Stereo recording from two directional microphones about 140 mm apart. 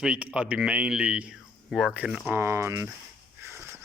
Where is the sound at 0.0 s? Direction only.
10° right (ahead or behind).